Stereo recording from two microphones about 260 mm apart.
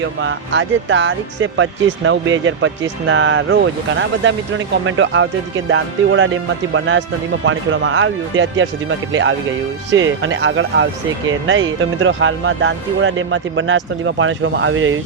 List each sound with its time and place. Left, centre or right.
0.2 s speech: right